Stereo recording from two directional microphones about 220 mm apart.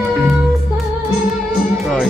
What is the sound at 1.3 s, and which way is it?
Music, centre (ahead or behind).